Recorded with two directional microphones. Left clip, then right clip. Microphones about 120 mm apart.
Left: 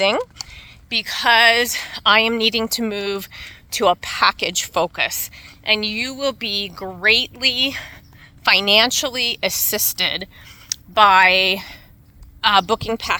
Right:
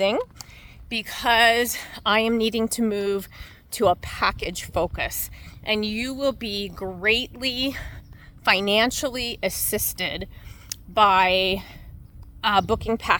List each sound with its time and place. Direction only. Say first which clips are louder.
0.3 s a woman's voice: left 9 dB; 55° right (ahead or behind)
8.4 s a woman's voice: left 5 dB; 45° right (ahead or behind)